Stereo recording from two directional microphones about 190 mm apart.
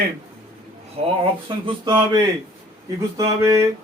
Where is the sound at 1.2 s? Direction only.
25° right (ahead or behind).